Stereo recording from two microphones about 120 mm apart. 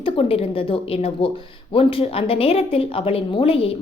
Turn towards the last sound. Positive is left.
turn(degrees=50)  # may be behind; listen again after turning